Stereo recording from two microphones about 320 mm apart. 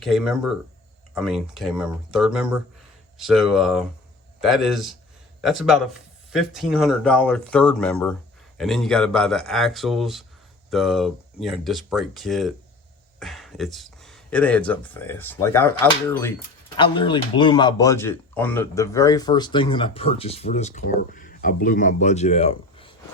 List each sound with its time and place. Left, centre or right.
0.0 s speech: centre